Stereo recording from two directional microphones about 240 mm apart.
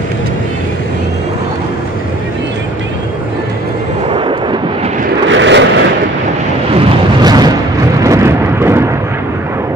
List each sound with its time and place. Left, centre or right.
4.1 s vehicle: right
5.3 s vehicle: right
6.7 s a sound: centre
8.0 s vehicle: centre